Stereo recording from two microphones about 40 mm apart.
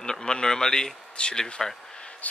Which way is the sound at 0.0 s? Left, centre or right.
Centre.